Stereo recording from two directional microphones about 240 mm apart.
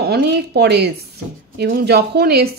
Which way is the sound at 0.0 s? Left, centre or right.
Right.